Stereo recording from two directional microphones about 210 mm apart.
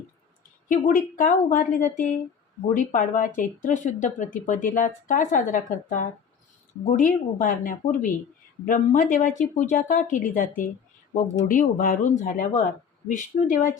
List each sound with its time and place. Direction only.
0.7 s speech: 40° left (ahead or behind)